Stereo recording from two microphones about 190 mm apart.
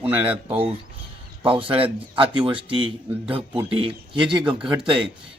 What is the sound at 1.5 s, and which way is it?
Speech, 25° right (ahead or behind).